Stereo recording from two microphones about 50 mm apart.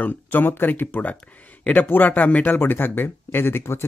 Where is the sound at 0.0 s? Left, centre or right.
Left.